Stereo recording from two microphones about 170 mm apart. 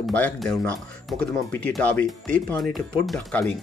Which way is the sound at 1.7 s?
10° left (ahead or behind).